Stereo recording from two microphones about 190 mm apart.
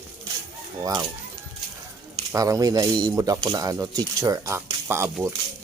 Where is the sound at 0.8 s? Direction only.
20° right (ahead or behind).